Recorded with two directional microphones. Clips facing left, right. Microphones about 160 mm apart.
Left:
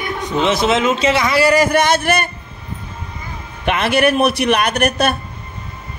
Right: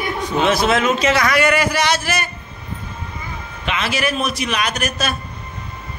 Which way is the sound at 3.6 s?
55° left (ahead or behind).